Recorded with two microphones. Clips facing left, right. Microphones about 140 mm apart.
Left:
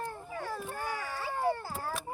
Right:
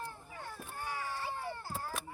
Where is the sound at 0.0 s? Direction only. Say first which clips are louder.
Left 7 dB; 90° left.